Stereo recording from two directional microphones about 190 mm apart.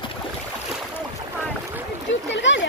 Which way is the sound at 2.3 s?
75° left (ahead or behind).